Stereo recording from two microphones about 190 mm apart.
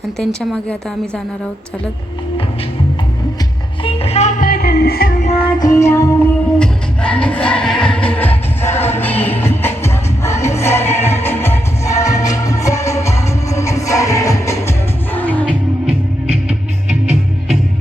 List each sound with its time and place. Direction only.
3.8 s music: 30° left (ahead or behind); by 5.1 s 55° left (ahead or behind)
5.2 s music: 25° left (ahead or behind); by 15.5 s 10° left (ahead or behind)
15.9 s music: 30° right (ahead or behind)